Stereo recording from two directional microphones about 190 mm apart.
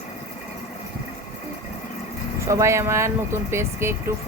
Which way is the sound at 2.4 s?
15° right (ahead or behind).